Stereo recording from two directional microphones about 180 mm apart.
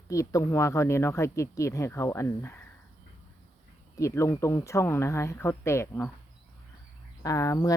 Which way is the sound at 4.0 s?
15° left (ahead or behind).